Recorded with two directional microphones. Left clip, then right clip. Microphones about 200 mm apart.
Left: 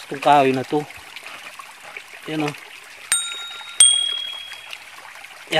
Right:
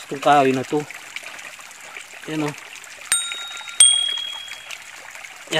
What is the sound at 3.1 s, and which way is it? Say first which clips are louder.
Bicycle bell: even; centre (ahead or behind).